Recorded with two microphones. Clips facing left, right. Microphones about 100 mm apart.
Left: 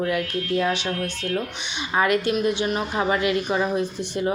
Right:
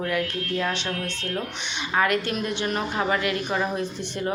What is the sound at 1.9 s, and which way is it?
A woman's voice, 20° left (ahead or behind).